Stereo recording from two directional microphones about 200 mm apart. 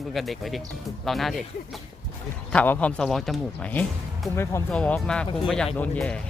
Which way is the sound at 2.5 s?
10° left (ahead or behind).